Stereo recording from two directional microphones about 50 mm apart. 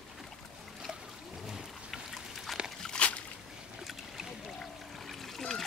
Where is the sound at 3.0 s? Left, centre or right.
Left.